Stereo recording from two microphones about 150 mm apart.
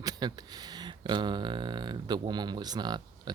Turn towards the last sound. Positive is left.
turn(degrees=-30)  # may be behind; listen again after turning